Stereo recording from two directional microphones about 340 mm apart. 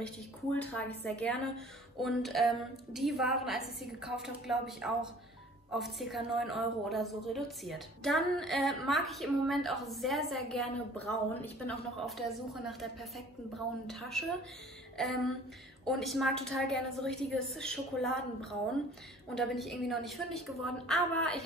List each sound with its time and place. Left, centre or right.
0.0 s a woman's voice: centre